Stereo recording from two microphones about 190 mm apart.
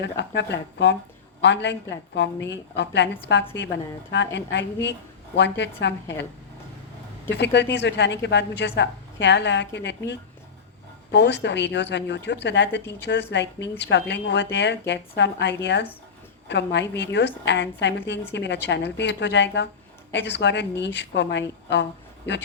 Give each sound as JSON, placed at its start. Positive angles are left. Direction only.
{"t": 0.0, "sound": "a woman's voice", "side_deg": 65}
{"t": 7.3, "sound": "a woman's voice", "side_deg": 65}
{"t": 11.1, "sound": "a woman's voice", "side_deg": 65}